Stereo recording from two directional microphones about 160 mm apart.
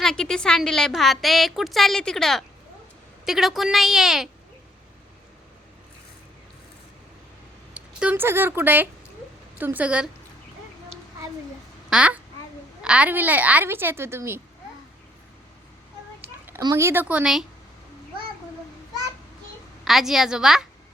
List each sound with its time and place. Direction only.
0.0 s a woman's voice: 5° left (ahead or behind)
7.7 s a woman's voice: 5° right (ahead or behind)
11.9 s a child's voice: 5° right (ahead or behind)
16.6 s a woman's voice: 20° right (ahead or behind)
19.8 s a woman's voice: centre (ahead or behind)